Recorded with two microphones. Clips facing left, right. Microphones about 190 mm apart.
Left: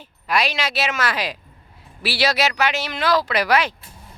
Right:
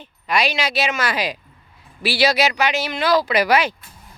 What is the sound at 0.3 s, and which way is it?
Speech, centre (ahead or behind).